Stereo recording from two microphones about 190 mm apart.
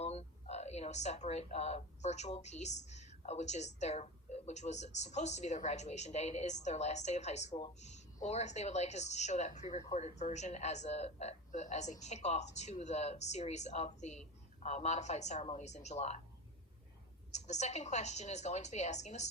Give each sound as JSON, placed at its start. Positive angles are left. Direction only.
{"t": 0.0, "sound": "speech", "side_deg": 35}
{"t": 9.6, "sound": "speech", "side_deg": 25}
{"t": 17.3, "sound": "speech", "side_deg": 35}